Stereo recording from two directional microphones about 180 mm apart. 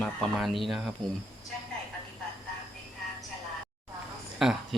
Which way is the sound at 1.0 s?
25° right (ahead or behind).